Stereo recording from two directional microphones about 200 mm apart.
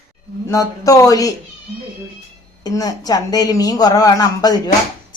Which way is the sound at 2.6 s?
20° left (ahead or behind).